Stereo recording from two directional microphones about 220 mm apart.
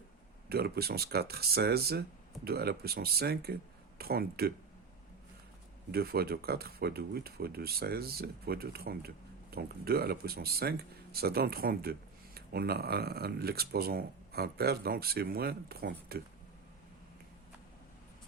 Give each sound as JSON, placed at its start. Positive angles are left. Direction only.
{"t": 0.4, "sound": "speech", "side_deg": -45}
{"t": 5.9, "sound": "speech", "side_deg": -45}